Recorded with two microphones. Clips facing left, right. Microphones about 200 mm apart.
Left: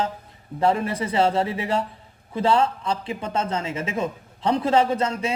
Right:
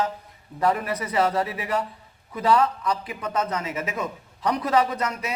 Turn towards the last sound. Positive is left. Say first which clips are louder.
# left 5 dB
turn(degrees=25)  # may be behind; listen again after turning